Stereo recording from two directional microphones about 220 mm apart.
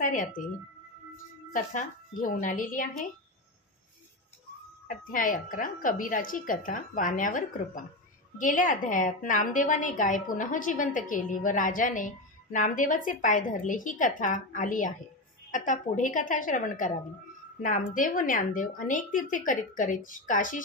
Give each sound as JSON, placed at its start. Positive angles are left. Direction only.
{"t": 0.0, "sound": "a woman's voice", "side_deg": 35}
{"t": 4.8, "sound": "a woman's voice", "side_deg": 40}